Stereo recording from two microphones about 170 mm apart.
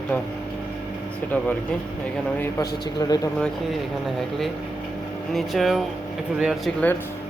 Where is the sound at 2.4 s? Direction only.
20° left (ahead or behind).